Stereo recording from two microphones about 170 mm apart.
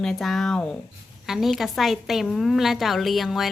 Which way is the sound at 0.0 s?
Centre (ahead or behind).